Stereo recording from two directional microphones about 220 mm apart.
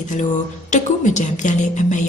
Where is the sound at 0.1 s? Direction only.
35° left (ahead or behind).